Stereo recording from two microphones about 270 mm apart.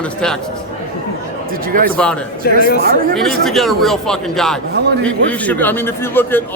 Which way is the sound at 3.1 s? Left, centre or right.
Centre.